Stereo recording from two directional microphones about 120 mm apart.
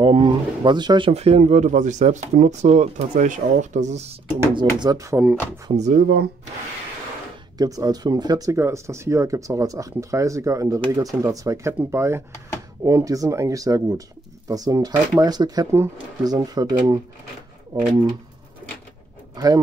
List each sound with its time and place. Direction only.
0.0 s speech: 40° right (ahead or behind)
1.1 s speech: 60° right (ahead or behind)
4.6 s speech: 35° right (ahead or behind)
5.7 s speech: 75° right (ahead or behind)
7.5 s speech: 30° right (ahead or behind)
19.3 s speech: 35° right (ahead or behind)